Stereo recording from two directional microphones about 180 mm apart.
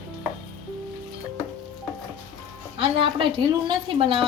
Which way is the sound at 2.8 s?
30° right (ahead or behind).